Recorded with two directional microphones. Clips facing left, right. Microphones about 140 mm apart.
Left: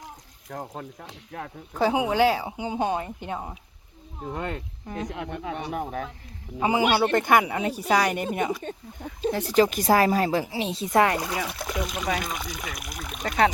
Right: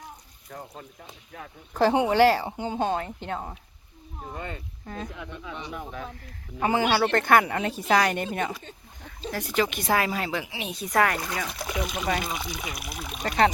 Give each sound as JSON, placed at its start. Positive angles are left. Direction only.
{"t": 0.7, "sound": "speech", "side_deg": 75}
{"t": 1.7, "sound": "speech", "side_deg": 0}
{"t": 4.3, "sound": "speech", "side_deg": 80}
{"t": 5.0, "sound": "speech", "side_deg": 70}
{"t": 6.6, "sound": "speech", "side_deg": 15}
{"t": 9.3, "sound": "speech", "side_deg": 35}
{"t": 10.7, "sound": "speech", "side_deg": 25}
{"t": 11.3, "sound": "speech", "side_deg": 5}